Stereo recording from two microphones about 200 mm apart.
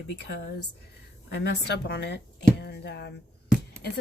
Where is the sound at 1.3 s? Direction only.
55° left (ahead or behind).